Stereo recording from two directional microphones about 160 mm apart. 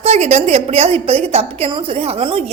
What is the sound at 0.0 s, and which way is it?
A woman's voice, 45° right (ahead or behind).